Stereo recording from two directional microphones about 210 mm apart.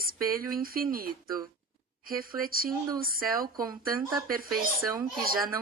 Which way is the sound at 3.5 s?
15° right (ahead or behind).